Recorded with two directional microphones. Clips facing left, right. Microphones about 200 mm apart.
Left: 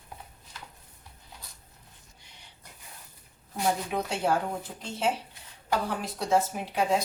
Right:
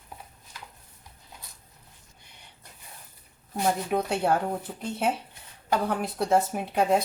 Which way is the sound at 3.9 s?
55° right (ahead or behind).